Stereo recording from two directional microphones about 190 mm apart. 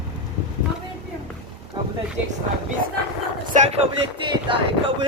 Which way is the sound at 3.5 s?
35° right (ahead or behind).